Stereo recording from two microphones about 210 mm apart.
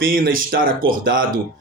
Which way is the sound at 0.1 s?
40° right (ahead or behind).